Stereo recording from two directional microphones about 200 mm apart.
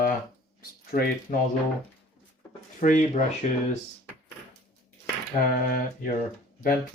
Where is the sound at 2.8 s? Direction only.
40° left (ahead or behind).